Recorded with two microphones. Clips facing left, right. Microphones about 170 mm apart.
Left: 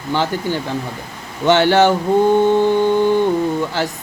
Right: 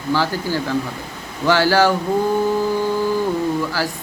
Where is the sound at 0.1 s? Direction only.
20° left (ahead or behind).